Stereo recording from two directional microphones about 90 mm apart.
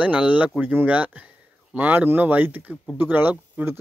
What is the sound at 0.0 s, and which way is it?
Speech, 15° right (ahead or behind).